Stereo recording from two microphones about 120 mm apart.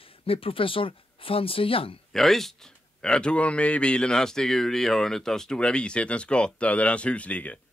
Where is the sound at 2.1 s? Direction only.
Centre (ahead or behind).